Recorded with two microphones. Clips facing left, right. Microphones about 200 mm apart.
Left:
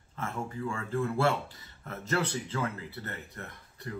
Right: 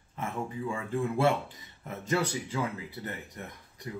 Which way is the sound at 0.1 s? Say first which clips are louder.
Right 1 dB; 15° right (ahead or behind).